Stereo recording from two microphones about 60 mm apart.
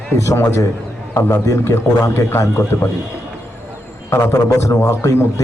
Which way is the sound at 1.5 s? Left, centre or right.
Left.